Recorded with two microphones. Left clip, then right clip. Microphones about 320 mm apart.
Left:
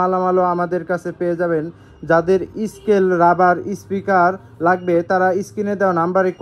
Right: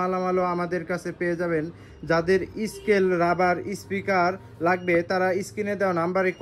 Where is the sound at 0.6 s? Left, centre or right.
Centre.